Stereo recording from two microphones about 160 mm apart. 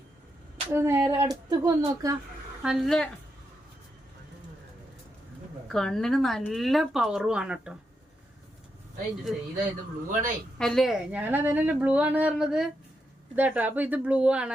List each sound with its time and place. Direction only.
0.7 s a woman's voice: 15° right (ahead or behind)
2.6 s speech: centre (ahead or behind)
5.6 s speech: centre (ahead or behind)
10.1 s speech: 55° right (ahead or behind)
10.6 s a woman's voice: centre (ahead or behind)